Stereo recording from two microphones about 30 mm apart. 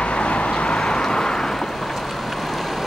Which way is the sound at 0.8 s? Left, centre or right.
Left.